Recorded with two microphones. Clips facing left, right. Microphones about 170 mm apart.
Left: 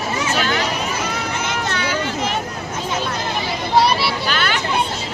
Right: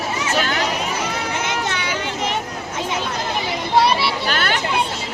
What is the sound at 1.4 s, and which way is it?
Children playing, 15° right (ahead or behind).